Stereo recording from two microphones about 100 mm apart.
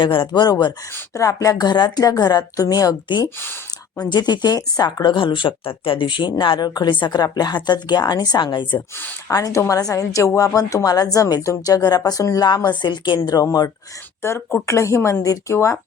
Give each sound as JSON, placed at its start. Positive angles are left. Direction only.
{"t": 0.0, "sound": "speech", "side_deg": 50}
{"t": 1.1, "sound": "a woman's voice", "side_deg": 35}
{"t": 3.2, "sound": "speech", "side_deg": 20}
{"t": 4.0, "sound": "speech", "side_deg": 45}
{"t": 9.3, "sound": "a woman's voice", "side_deg": 35}
{"t": 13.1, "sound": "a woman's voice", "side_deg": 35}
{"t": 14.2, "sound": "speech", "side_deg": 25}